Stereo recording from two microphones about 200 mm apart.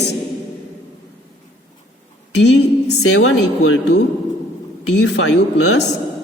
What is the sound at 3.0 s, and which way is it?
Speech, 90° left.